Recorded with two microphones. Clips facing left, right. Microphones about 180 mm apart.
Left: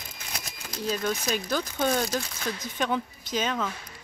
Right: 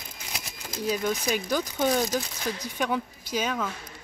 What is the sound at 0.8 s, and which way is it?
Speech, 15° right (ahead or behind).